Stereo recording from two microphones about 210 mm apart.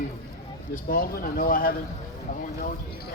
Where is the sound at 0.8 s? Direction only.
45° left (ahead or behind).